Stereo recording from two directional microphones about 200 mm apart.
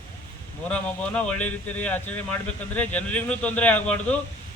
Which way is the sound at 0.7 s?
5° left (ahead or behind).